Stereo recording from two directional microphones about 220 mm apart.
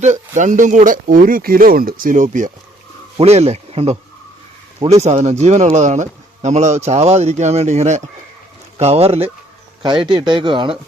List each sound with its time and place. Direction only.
0.0 s speech: 35° right (ahead or behind)